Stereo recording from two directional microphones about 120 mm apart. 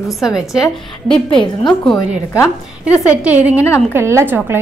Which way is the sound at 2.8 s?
10° right (ahead or behind).